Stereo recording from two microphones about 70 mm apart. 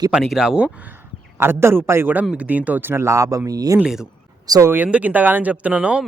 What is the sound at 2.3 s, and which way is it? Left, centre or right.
Speech, centre.